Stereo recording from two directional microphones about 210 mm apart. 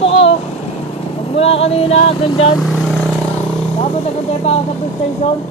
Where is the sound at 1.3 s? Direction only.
30° left (ahead or behind).